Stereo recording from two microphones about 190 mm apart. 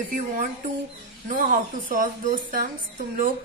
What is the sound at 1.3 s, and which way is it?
A woman's voice, 45° right (ahead or behind).